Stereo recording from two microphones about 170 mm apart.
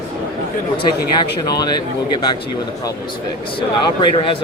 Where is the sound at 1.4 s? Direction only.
25° left (ahead or behind).